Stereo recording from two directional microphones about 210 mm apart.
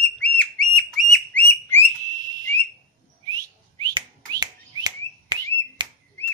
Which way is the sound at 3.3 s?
15° right (ahead or behind).